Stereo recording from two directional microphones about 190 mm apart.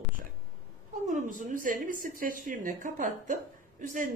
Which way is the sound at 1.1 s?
45° right (ahead or behind).